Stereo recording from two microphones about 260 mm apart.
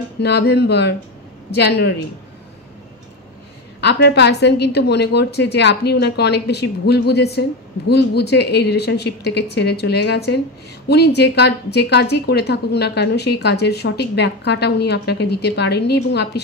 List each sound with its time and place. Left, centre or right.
0.2 s a woman's voice: left
3.8 s a woman's voice: left